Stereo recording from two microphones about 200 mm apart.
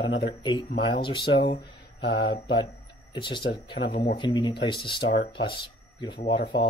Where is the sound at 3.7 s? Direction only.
50° left (ahead or behind).